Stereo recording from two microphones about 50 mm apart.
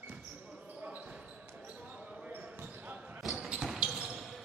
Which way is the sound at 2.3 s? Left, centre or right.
Right.